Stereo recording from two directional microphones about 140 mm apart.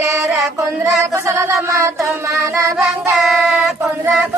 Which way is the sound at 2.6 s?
20° right (ahead or behind).